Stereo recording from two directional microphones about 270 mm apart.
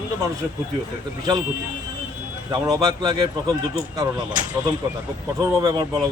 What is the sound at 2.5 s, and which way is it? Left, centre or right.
Speech, centre.